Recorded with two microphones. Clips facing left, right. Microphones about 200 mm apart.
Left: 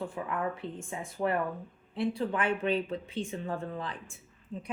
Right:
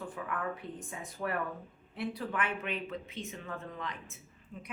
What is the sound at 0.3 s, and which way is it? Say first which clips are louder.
A woman's voice: left 4 dB; 25° left (ahead or behind).